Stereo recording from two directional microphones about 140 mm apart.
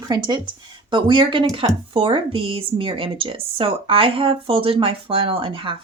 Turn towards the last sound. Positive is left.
turn(degrees=-40)  # may be behind; listen again after turning